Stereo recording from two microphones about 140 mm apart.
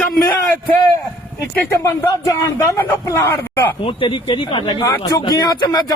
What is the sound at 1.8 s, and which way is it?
Speech, 20° left (ahead or behind).